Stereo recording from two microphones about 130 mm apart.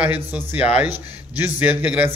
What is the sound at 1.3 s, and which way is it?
Speech, 15° right (ahead or behind).